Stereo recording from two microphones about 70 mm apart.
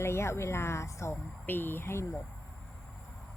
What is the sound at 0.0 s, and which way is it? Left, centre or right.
Speech, left.